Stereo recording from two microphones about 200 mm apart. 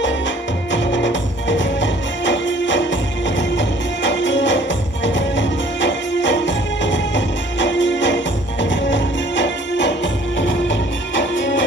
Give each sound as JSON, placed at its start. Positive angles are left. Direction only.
{"t": 0.7, "sound": "music", "side_deg": 65}